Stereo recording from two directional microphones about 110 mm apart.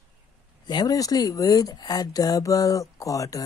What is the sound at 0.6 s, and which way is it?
Speech, 40° left (ahead or behind).